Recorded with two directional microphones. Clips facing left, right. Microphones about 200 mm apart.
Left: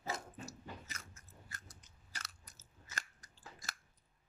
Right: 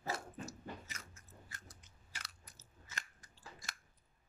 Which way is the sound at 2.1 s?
45° left (ahead or behind).